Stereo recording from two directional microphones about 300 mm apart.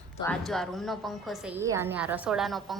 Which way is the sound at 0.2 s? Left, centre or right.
Centre.